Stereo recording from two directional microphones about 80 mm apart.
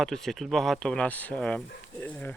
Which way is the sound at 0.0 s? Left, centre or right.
Centre.